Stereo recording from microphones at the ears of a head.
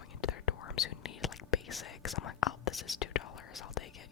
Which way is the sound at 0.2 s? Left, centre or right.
Left.